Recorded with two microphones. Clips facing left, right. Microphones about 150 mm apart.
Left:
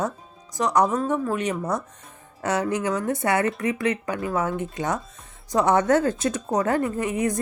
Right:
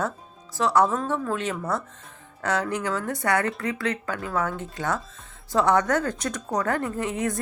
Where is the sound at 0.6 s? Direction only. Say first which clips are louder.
Even; 15° left (ahead or behind).